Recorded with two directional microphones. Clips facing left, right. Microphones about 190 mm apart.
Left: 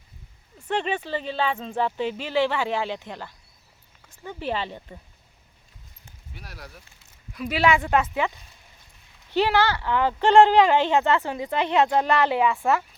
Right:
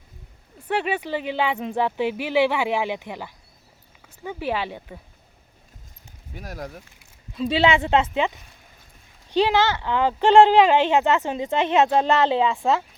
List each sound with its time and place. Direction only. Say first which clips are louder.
0.7 s speech: right 2 dB; 10° right (ahead or behind)
6.3 s speech: right 9 dB; 45° right (ahead or behind)
7.3 s speech: right 2 dB; 25° right (ahead or behind)
9.3 s speech: right 2 dB; 15° right (ahead or behind)